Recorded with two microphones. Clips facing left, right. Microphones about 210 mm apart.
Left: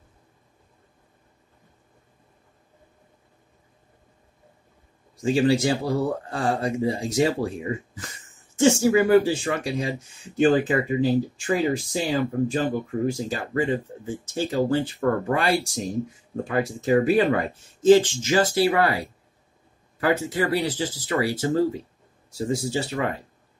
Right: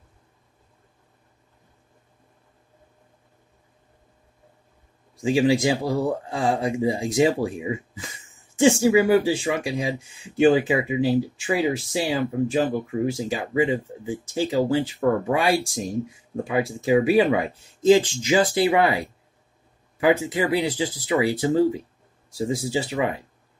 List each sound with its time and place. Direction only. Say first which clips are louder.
5.2 s speech: right 1 dB; 10° right (ahead or behind)